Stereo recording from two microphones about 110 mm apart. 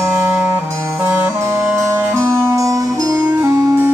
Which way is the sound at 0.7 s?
25° right (ahead or behind).